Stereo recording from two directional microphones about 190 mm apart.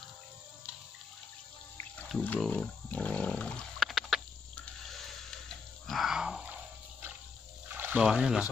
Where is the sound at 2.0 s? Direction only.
5° left (ahead or behind).